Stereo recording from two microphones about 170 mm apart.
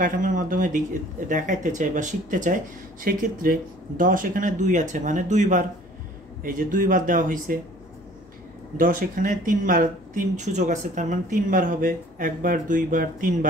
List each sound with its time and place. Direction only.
0.0 s speech: 50° right (ahead or behind)
8.7 s speech: 50° right (ahead or behind)